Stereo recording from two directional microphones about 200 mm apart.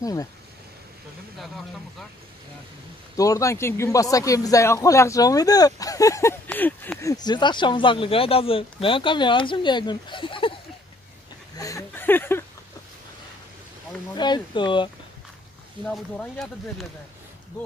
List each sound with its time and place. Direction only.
0.0 s speech: 15° left (ahead or behind)
3.2 s speech: 15° left (ahead or behind)
11.5 s a sound: 15° left (ahead or behind)
14.1 s speech: 20° left (ahead or behind)
15.8 s speech: 5° left (ahead or behind)